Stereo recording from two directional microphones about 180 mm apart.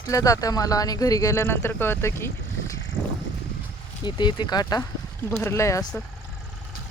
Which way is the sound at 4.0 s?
25° left (ahead or behind).